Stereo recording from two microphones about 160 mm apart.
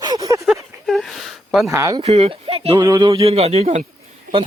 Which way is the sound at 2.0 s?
40° right (ahead or behind).